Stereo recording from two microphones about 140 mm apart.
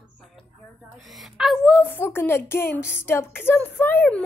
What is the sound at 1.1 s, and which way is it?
Speech, centre (ahead or behind).